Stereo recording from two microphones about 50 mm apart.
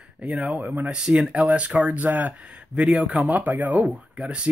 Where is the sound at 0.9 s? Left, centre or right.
Centre.